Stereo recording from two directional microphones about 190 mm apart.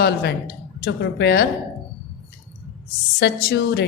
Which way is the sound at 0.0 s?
60° left (ahead or behind).